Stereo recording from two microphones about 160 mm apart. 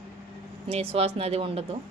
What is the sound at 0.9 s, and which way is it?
Speech, 40° right (ahead or behind).